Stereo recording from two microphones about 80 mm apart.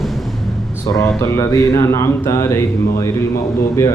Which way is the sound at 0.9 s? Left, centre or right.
Left.